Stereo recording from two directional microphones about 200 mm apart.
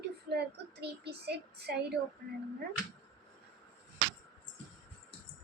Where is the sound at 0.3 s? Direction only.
55° right (ahead or behind).